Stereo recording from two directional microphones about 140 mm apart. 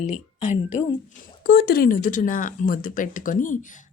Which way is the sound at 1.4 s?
90° left.